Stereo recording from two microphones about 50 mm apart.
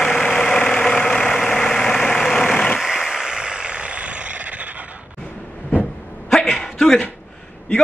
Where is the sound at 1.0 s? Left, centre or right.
Centre.